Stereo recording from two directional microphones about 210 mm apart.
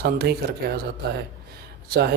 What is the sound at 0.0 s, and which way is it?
Speech, 50° right (ahead or behind).